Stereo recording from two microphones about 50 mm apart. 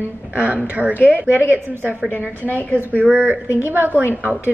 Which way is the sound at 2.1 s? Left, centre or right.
Left.